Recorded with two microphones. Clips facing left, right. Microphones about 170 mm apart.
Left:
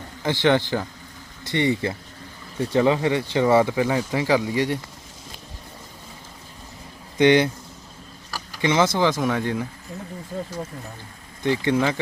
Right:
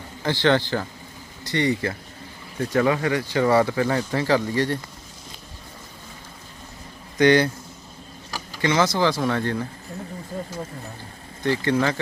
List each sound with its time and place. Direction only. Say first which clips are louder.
0.2 s speech: left 1 dB; 15° left (ahead or behind)
7.2 s speech: left 1 dB; 20° left (ahead or behind)
8.7 s speech: left 1 dB; 25° left (ahead or behind)
11.4 s speech: left 1 dB; 15° left (ahead or behind)